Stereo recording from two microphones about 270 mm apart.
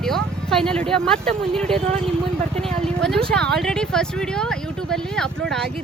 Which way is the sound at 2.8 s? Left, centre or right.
Centre.